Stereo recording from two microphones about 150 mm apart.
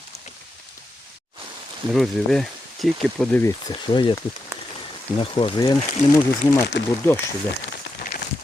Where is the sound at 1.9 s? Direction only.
Centre (ahead or behind).